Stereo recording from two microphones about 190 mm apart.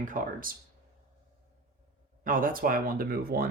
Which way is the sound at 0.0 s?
45° right (ahead or behind).